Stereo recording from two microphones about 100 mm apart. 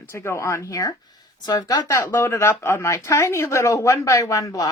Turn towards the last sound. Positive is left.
turn(degrees=35)  # may be behind; listen again after turning